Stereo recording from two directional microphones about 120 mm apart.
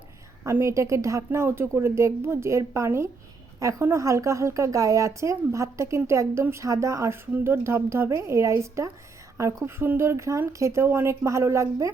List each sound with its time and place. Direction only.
0.4 s a woman's voice: 25° right (ahead or behind)